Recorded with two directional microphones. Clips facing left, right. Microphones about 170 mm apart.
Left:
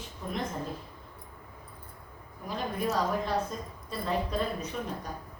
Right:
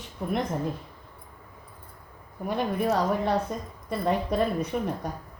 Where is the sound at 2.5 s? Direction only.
65° right (ahead or behind).